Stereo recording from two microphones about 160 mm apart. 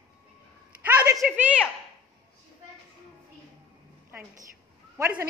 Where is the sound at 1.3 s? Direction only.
5° right (ahead or behind).